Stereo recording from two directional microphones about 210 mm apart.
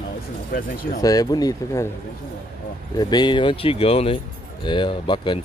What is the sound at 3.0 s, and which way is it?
Speech, 20° left (ahead or behind).